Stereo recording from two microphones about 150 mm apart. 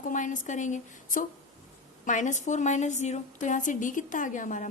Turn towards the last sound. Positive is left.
turn(degrees=60)  # may be behind; listen again after turning